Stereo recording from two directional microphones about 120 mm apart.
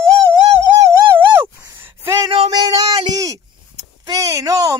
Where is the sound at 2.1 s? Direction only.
30° right (ahead or behind).